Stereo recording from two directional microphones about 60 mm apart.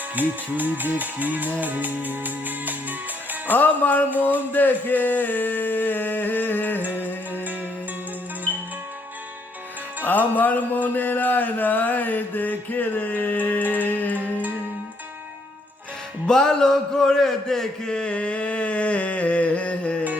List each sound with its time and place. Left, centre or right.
0.2 s speech: right
3.4 s music: left
6.8 s music: right
10.0 s music: left
16.2 s a man's voice: centre